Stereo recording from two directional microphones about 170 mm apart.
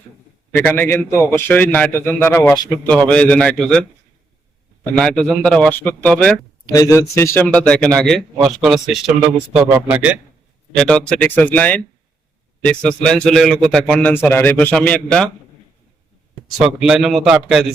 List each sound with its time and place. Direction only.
0.5 s a man's voice: 10° left (ahead or behind)
4.9 s a man's voice: 5° left (ahead or behind)
6.7 s a man's voice: 20° left (ahead or behind); by 10.2 s 10° right (ahead or behind)
10.8 s a man's voice: 5° left (ahead or behind)
16.8 s a man's voice: centre (ahead or behind)